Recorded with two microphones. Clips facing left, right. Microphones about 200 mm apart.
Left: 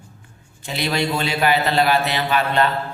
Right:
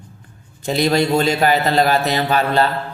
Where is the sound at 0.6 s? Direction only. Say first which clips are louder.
Right 6 dB; 40° right (ahead or behind).